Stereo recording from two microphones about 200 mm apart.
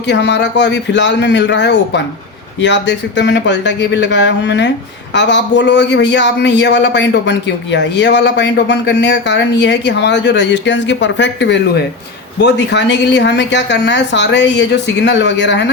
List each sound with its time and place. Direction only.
0.1 s a man's voice: 60° left (ahead or behind)